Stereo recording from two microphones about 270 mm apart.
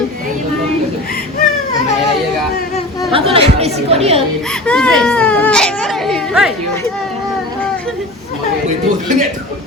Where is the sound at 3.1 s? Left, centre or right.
Right.